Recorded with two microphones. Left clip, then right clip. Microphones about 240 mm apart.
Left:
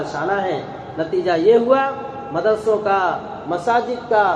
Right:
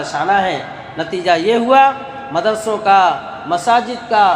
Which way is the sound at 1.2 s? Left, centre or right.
Right.